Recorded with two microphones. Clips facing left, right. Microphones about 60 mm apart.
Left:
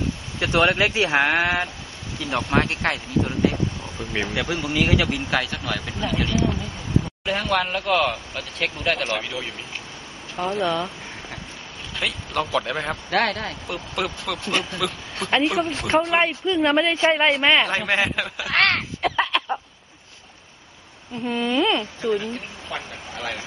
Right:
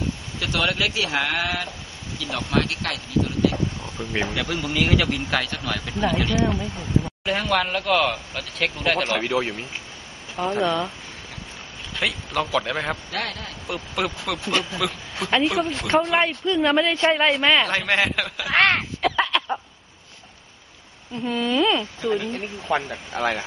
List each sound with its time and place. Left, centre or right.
0.7 s speech: left
2.6 s speech: left
3.8 s speech: centre
9.2 s speech: right
10.6 s speech: centre
11.9 s speech: centre
13.1 s speech: left
13.7 s speech: centre
18.9 s a sound: centre
21.2 s speech: centre
22.7 s speech: right